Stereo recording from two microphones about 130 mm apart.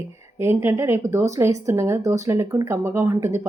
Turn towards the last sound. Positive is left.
turn(degrees=-20)  # may be behind; listen again after turning